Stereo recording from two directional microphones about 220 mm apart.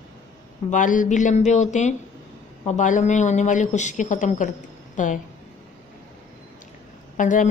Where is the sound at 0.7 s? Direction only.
35° left (ahead or behind).